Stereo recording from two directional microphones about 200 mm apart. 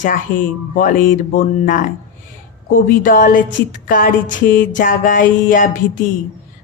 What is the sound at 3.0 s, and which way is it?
Speech, 40° left (ahead or behind).